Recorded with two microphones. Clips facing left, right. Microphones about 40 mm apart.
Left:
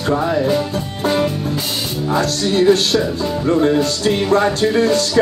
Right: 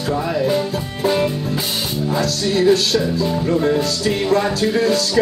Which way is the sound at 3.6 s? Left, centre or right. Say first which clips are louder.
Left 3 dB; left.